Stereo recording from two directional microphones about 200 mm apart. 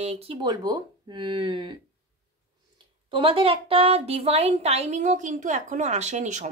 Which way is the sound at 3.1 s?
25° right (ahead or behind).